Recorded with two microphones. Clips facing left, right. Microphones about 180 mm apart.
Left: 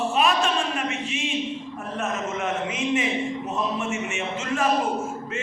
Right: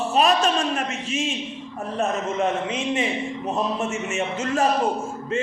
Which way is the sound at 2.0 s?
30° right (ahead or behind).